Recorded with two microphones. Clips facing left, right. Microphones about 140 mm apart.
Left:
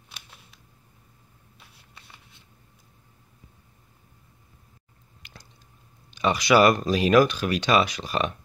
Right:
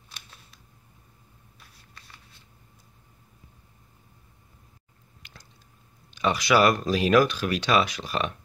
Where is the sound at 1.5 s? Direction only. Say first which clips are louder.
Left 1 dB; 20° left (ahead or behind).